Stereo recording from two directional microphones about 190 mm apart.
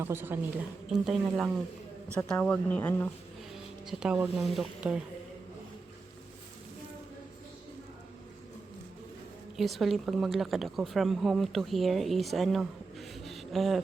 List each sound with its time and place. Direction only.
0.0 s a woman's voice: 10° right (ahead or behind)
2.3 s speech: 5° left (ahead or behind)
3.5 s speech: centre (ahead or behind)
9.6 s a woman's voice: centre (ahead or behind)